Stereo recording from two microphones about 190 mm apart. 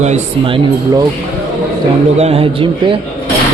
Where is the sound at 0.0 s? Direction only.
30° right (ahead or behind).